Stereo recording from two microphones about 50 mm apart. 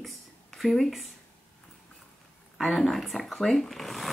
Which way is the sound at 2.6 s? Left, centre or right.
Centre.